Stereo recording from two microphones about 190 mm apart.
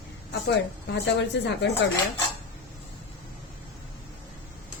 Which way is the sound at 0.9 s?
65° left (ahead or behind).